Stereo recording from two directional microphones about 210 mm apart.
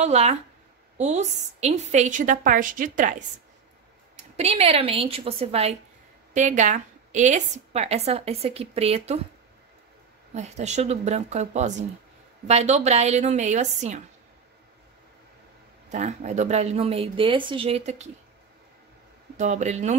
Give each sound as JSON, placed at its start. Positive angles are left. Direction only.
{"t": 0.0, "sound": "a woman's voice", "side_deg": -30}
{"t": 4.4, "sound": "a woman's voice", "side_deg": -30}
{"t": 10.3, "sound": "a woman's voice", "side_deg": -30}
{"t": 15.9, "sound": "a woman's voice", "side_deg": -35}
{"t": 19.3, "sound": "a woman's voice", "side_deg": -35}